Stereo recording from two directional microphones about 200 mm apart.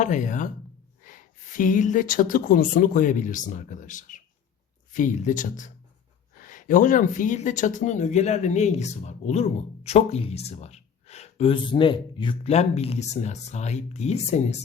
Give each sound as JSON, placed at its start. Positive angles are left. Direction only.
{"t": 0.0, "sound": "speech", "side_deg": 40}